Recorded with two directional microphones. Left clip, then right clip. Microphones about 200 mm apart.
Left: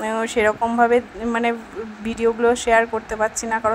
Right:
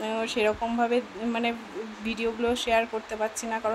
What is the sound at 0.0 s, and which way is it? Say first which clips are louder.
Speech: left 7 dB; 20° left (ahead or behind).